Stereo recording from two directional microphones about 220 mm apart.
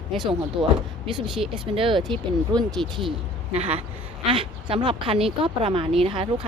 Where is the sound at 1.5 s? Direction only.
25° right (ahead or behind).